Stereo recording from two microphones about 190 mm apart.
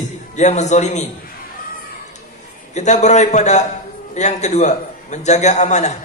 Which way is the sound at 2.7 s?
40° left (ahead or behind).